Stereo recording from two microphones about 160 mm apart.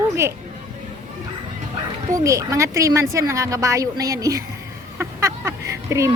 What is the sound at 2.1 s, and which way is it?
A woman's voice, 20° right (ahead or behind).